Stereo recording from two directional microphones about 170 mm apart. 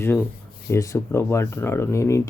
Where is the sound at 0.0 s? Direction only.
15° left (ahead or behind).